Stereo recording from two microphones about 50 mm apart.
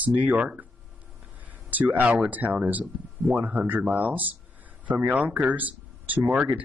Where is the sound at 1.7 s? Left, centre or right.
Right.